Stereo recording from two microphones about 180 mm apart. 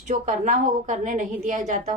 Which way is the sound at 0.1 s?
45° right (ahead or behind).